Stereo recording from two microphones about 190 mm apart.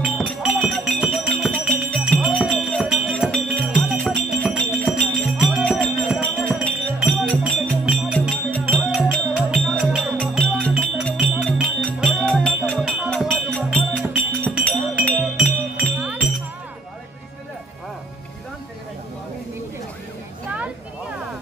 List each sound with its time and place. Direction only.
0.0 s music: 5° right (ahead or behind)
15.7 s music: 5° right (ahead or behind)